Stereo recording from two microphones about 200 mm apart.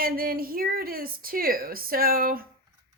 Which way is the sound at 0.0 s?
45° right (ahead or behind).